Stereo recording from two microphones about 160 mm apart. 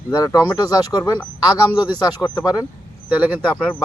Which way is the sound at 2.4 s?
25° left (ahead or behind).